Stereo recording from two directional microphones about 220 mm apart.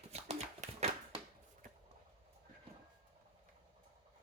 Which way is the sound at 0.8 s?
30° right (ahead or behind).